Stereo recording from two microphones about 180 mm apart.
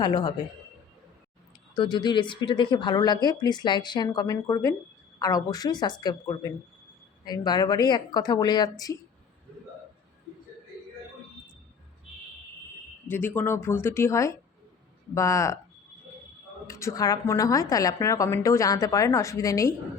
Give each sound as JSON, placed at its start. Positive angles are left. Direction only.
{"t": 0.0, "sound": "speech", "side_deg": 25}
{"t": 1.7, "sound": "speech", "side_deg": 25}
{"t": 13.1, "sound": "a woman's voice", "side_deg": 10}
{"t": 16.6, "sound": "a woman's voice", "side_deg": 15}